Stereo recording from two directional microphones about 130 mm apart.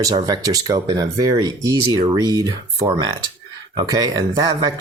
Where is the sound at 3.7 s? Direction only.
30° right (ahead or behind).